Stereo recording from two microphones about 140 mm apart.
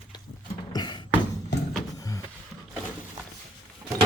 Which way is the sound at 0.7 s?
30° left (ahead or behind).